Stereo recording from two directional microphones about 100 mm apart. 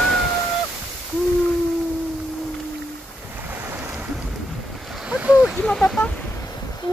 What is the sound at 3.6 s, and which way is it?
Boat, 20° right (ahead or behind).